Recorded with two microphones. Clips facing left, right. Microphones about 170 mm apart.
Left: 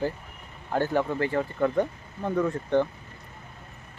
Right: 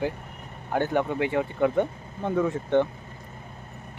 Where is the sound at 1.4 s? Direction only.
15° right (ahead or behind).